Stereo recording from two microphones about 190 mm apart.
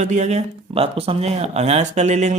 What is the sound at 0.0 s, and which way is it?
Speech, 35° right (ahead or behind).